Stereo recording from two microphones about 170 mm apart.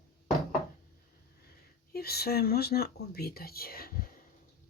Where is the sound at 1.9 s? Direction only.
65° left (ahead or behind).